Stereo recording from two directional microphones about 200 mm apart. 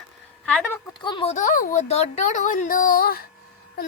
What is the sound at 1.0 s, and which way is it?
Speech, 25° left (ahead or behind).